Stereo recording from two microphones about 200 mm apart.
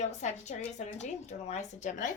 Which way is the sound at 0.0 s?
35° left (ahead or behind).